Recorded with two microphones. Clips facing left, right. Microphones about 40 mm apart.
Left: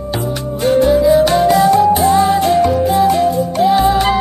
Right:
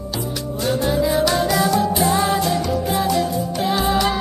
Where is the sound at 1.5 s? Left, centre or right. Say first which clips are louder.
Left 8 dB; left.